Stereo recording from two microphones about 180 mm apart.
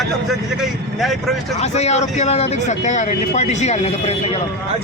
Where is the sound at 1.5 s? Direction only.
35° left (ahead or behind).